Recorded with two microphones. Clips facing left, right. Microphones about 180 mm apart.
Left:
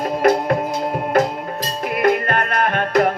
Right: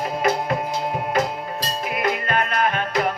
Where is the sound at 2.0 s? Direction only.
55° left (ahead or behind).